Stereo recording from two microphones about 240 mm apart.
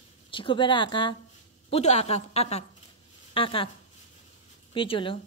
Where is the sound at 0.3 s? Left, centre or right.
Left.